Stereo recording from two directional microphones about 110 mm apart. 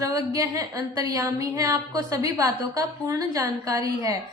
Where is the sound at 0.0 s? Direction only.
30° right (ahead or behind).